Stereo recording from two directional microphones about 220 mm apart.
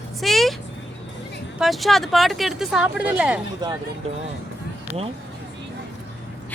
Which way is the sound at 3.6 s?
20° right (ahead or behind).